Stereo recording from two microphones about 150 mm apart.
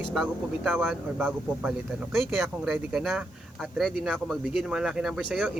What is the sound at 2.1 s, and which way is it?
Speech, centre (ahead or behind).